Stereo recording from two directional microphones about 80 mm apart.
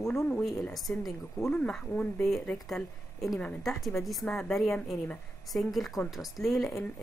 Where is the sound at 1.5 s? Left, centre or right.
Centre.